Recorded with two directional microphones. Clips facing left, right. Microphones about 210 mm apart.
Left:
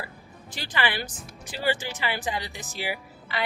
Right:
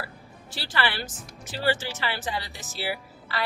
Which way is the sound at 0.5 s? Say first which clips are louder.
Even; 15° left (ahead or behind).